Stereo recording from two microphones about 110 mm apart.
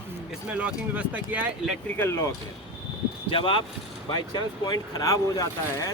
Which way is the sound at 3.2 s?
50° left (ahead or behind).